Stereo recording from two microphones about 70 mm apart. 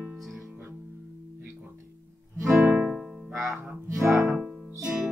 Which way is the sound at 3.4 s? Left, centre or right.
Right.